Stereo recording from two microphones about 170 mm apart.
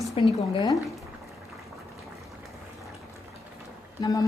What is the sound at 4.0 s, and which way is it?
Speech, 25° left (ahead or behind).